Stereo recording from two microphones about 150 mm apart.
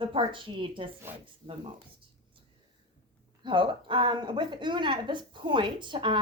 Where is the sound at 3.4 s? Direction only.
35° right (ahead or behind).